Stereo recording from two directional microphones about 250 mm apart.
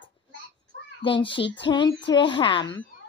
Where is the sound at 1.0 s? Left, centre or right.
Centre.